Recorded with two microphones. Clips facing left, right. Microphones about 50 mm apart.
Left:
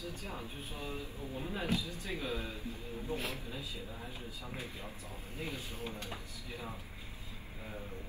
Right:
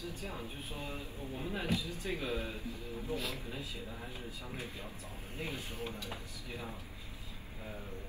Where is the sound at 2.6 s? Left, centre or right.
Left.